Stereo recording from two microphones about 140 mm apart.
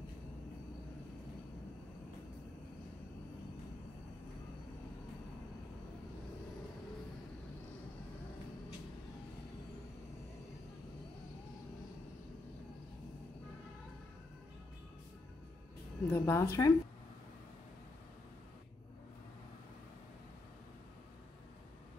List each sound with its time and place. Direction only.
16.1 s speech: 15° left (ahead or behind)